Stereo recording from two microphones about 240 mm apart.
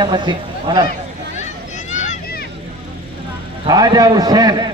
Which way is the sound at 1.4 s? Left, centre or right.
Left.